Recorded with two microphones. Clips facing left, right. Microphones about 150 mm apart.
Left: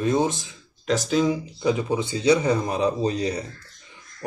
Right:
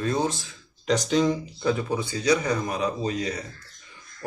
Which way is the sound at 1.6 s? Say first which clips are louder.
Left 2 dB; 20° left (ahead or behind).